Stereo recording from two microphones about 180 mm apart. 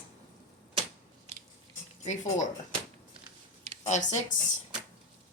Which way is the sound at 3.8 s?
40° left (ahead or behind).